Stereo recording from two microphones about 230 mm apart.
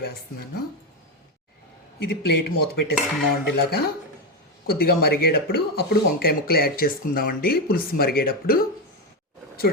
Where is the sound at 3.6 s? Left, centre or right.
Left.